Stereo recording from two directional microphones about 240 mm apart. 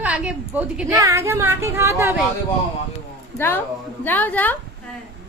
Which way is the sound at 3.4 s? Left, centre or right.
Centre.